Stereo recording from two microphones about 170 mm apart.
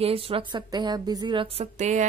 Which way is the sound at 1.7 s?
45° right (ahead or behind).